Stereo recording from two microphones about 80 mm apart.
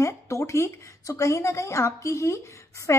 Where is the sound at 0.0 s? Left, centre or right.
Left.